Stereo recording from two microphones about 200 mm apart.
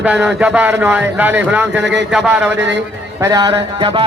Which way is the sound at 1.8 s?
60° right (ahead or behind).